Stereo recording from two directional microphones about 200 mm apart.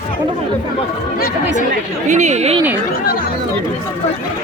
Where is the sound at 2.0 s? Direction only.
35° right (ahead or behind).